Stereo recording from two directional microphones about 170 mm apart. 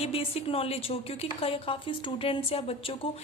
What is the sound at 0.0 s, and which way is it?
A woman's voice, 35° left (ahead or behind).